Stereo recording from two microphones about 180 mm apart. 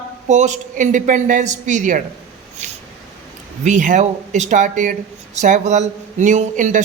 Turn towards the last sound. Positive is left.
turn(degrees=-45)  # may be behind; listen again after turning